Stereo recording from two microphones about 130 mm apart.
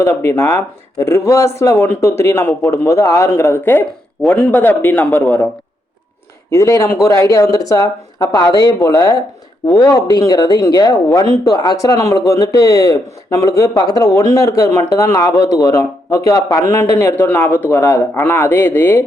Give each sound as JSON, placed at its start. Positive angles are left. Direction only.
{"t": 0.0, "sound": "speech", "side_deg": 20}
{"t": 6.5, "sound": "a man's voice", "side_deg": 25}